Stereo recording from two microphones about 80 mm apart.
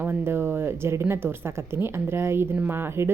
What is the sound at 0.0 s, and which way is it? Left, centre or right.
Speech, right.